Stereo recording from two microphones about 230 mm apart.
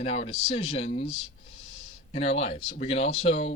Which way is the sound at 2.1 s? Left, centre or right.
Left.